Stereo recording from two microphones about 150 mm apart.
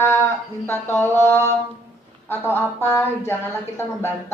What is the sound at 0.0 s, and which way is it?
Music, 15° left (ahead or behind).